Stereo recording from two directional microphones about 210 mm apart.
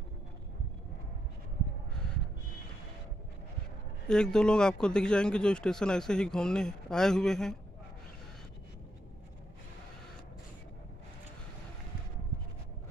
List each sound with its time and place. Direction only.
4.1 s a man's voice: 5° left (ahead or behind)